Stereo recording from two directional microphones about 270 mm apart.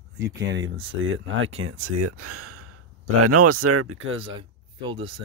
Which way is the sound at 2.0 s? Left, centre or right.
Right.